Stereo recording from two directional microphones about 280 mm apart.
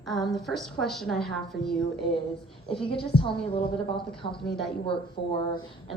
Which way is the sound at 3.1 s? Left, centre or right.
Left.